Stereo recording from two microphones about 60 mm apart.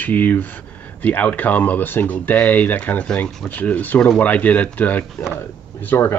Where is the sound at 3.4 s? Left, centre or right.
Left.